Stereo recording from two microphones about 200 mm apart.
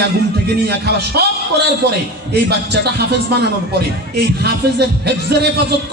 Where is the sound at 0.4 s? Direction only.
55° right (ahead or behind).